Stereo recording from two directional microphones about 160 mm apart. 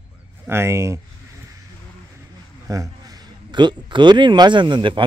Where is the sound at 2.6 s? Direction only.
20° right (ahead or behind).